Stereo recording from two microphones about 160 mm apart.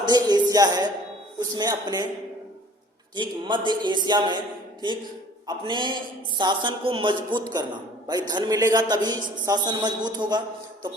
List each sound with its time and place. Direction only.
0.0 s a man's voice: 25° right (ahead or behind)
3.2 s a man's voice: 30° right (ahead or behind)